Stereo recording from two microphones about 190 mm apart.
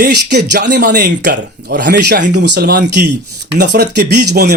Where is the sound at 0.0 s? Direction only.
55° right (ahead or behind).